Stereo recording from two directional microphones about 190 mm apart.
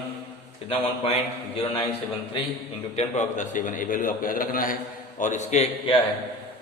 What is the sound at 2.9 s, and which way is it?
A man's voice, 40° left (ahead or behind).